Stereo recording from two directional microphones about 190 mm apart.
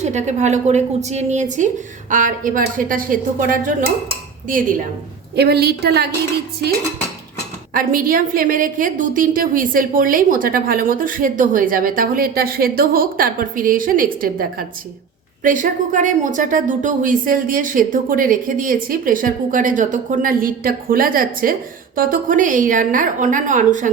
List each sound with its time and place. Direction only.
0.0 s a woman's voice: 35° right (ahead or behind)
5.4 s a woman's voice: 55° right (ahead or behind)
7.7 s a woman's voice: 50° right (ahead or behind)